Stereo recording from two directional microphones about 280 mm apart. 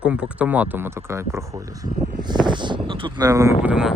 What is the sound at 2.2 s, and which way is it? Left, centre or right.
Speech, centre.